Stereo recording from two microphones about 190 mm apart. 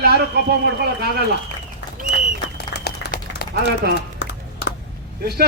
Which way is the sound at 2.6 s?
60° left (ahead or behind).